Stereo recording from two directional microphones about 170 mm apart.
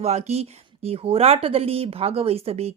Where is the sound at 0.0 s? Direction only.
40° right (ahead or behind).